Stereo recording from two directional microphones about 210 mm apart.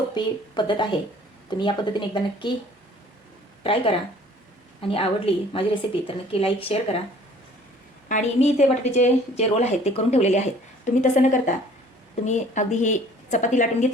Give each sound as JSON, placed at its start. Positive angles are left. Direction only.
{"t": 0.1, "sound": "a woman's voice", "side_deg": 20}
{"t": 3.6, "sound": "a woman's voice", "side_deg": 25}
{"t": 8.0, "sound": "a woman's voice", "side_deg": 35}